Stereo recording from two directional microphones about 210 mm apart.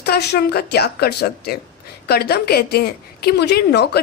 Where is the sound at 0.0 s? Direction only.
50° left (ahead or behind).